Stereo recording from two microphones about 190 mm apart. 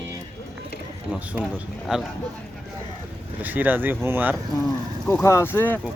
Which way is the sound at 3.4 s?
10° right (ahead or behind).